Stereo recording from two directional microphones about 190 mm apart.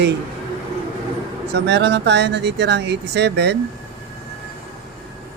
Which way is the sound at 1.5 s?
60° right (ahead or behind).